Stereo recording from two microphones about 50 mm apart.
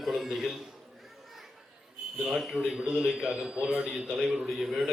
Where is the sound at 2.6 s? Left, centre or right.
Centre.